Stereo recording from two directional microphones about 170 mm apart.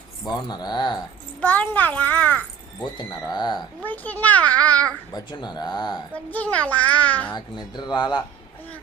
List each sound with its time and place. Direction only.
0.3 s speech: 25° left (ahead or behind)
1.4 s a child's voice: 10° left (ahead or behind)
3.0 s speech: 25° left (ahead or behind)
3.8 s a child's voice: 10° left (ahead or behind)
5.1 s speech: 25° left (ahead or behind)
6.1 s a child's voice: 10° left (ahead or behind)
7.3 s speech: 25° left (ahead or behind)